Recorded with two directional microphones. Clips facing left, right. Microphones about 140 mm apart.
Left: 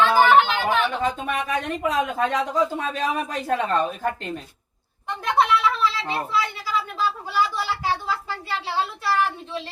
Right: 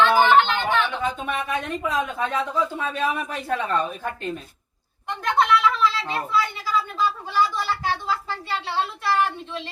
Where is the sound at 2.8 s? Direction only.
35° left (ahead or behind).